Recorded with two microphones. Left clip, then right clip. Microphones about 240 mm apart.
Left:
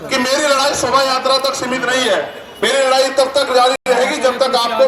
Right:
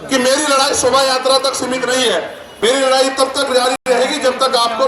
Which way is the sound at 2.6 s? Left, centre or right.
Centre.